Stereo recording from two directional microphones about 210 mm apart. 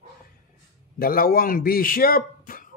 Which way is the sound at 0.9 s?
45° left (ahead or behind).